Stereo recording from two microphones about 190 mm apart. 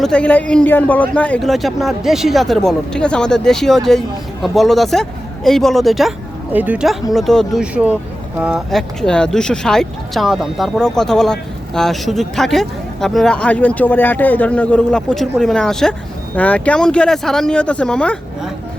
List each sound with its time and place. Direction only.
0.0 s speech: 5° left (ahead or behind)